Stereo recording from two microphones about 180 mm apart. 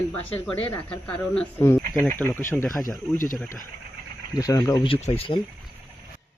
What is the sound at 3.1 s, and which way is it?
Speech, 50° left (ahead or behind).